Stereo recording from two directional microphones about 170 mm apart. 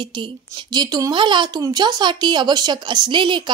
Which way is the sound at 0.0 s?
25° right (ahead or behind).